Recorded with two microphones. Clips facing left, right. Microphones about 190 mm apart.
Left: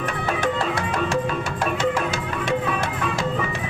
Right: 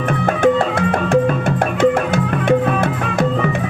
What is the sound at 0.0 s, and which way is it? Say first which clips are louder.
Music: right 9 dB; 55° right (ahead or behind).